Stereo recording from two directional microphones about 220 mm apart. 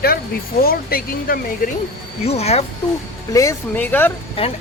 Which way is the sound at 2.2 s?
30° left (ahead or behind).